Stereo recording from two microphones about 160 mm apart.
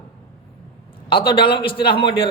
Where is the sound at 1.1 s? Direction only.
30° left (ahead or behind).